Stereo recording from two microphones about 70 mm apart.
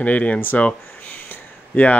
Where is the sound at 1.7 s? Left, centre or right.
Left.